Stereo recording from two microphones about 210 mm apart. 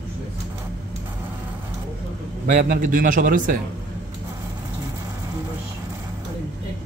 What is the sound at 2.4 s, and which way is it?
A man's voice, 40° right (ahead or behind).